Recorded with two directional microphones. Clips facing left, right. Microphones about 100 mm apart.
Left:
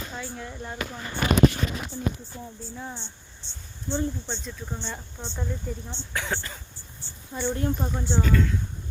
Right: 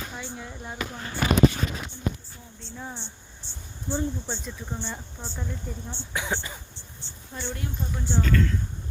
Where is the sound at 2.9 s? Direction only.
15° right (ahead or behind).